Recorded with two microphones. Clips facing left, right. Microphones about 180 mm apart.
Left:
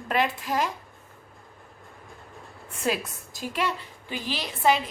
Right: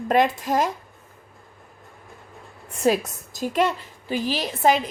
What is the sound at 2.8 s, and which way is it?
A woman's voice, 40° right (ahead or behind).